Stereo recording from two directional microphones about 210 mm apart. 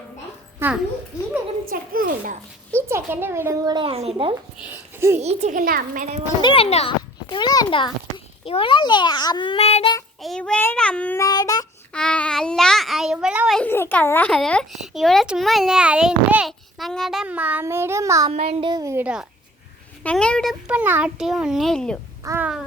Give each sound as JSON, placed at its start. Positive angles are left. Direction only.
{"t": 0.6, "sound": "a child's voice", "side_deg": -10}
{"t": 1.7, "sound": "a child's voice", "side_deg": -40}
{"t": 2.7, "sound": "a woman's voice", "side_deg": -10}
{"t": 4.6, "sound": "a sound", "side_deg": -10}
{"t": 5.2, "sound": "a child's voice", "side_deg": -30}
{"t": 6.4, "sound": "a sound", "side_deg": 25}
{"t": 8.4, "sound": "a child's voice", "side_deg": 25}
{"t": 10.2, "sound": "child singing", "side_deg": 0}
{"t": 11.9, "sound": "a child's voice", "side_deg": 5}
{"t": 18.3, "sound": "speech", "side_deg": -30}
{"t": 20.1, "sound": "a child's voice", "side_deg": 5}
{"t": 22.2, "sound": "a child's voice", "side_deg": -15}